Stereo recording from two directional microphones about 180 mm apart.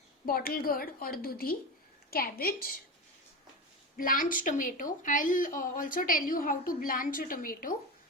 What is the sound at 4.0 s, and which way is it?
Speech, 50° left (ahead or behind).